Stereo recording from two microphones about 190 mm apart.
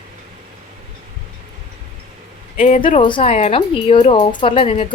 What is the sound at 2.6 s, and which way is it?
Speech, 40° left (ahead or behind).